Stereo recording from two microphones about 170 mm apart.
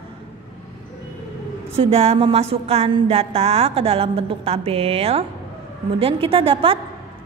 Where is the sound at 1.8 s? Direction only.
35° right (ahead or behind).